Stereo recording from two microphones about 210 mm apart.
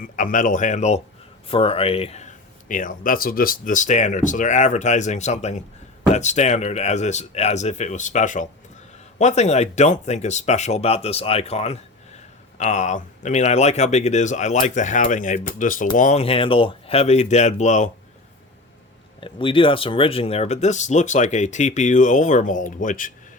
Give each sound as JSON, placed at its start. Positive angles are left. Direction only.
{"t": 0.0, "sound": "speech", "side_deg": 40}
{"t": 19.2, "sound": "speech", "side_deg": 25}